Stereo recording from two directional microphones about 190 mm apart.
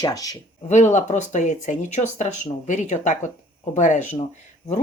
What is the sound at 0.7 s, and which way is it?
A woman's voice, 40° left (ahead or behind).